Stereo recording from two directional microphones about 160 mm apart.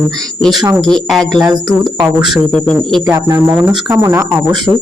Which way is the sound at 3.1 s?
20° right (ahead or behind).